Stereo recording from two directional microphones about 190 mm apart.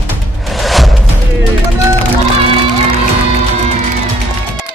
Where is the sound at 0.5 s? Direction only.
Centre (ahead or behind).